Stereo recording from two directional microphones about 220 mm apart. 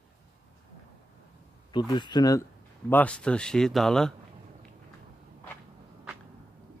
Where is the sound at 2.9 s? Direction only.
5° left (ahead or behind).